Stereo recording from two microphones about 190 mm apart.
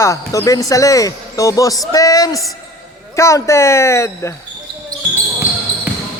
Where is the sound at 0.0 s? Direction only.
15° left (ahead or behind).